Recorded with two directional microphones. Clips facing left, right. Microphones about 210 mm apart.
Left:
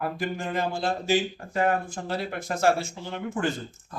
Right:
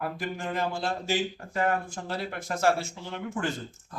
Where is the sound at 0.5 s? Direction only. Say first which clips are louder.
Left 3 dB; 20° left (ahead or behind).